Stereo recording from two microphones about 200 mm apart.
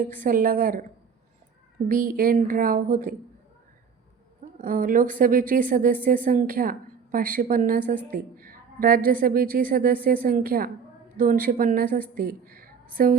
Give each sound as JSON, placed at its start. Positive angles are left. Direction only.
{"t": 0.2, "sound": "a woman's voice", "side_deg": -45}
{"t": 1.9, "sound": "a woman's voice", "side_deg": -45}
{"t": 4.5, "sound": "a woman's voice", "side_deg": -45}